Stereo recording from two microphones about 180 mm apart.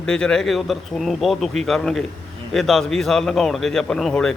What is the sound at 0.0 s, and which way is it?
A man's voice, 5° left (ahead or behind).